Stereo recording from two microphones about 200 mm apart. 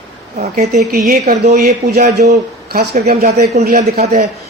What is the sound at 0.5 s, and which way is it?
Speech, 40° right (ahead or behind).